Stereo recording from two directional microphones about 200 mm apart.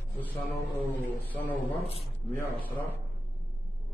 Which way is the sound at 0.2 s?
10° left (ahead or behind).